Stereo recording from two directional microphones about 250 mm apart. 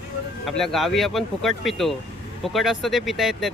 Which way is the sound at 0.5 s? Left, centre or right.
Centre.